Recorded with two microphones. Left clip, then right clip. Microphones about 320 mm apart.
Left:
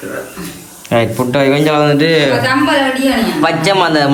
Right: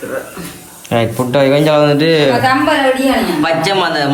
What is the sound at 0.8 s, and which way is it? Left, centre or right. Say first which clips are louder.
A man's voice: left 2 dB; centre.